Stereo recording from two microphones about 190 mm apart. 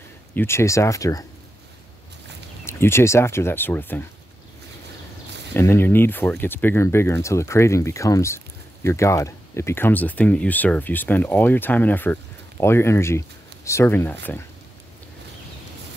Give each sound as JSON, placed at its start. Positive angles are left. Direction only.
{"t": 0.3, "sound": "speech", "side_deg": 10}
{"t": 2.6, "sound": "speech", "side_deg": 15}
{"t": 5.5, "sound": "speech", "side_deg": 10}